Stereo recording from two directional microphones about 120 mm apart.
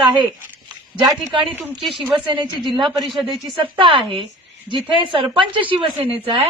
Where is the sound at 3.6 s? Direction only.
45° right (ahead or behind).